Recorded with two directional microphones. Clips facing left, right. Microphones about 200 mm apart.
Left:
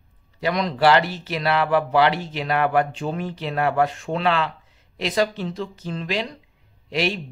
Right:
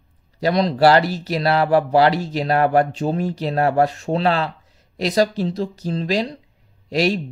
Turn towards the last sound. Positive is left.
turn(degrees=-40)  # may be behind; listen again after turning